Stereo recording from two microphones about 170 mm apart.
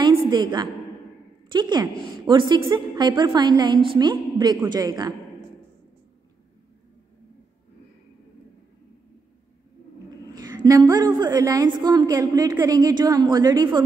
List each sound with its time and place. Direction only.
0.1 s a sound: 25° right (ahead or behind)
1.5 s a woman's voice: 25° right (ahead or behind)
10.3 s a woman's voice: 25° right (ahead or behind)